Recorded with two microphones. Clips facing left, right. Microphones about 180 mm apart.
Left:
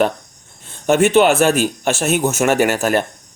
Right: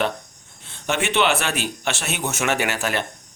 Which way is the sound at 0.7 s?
45° left (ahead or behind).